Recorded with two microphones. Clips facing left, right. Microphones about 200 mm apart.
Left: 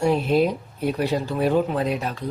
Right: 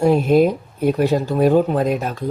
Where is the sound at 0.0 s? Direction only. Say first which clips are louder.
Right 5 dB; 45° right (ahead or behind).